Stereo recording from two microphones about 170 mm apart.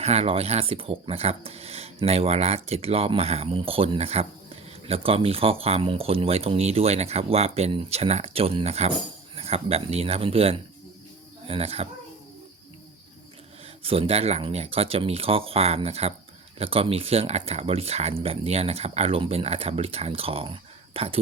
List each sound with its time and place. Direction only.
0.0 s speech: 40° right (ahead or behind)
13.8 s speech: 35° right (ahead or behind)